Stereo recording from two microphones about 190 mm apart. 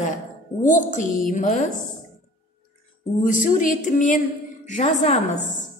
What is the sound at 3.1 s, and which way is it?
A woman's voice, 45° left (ahead or behind).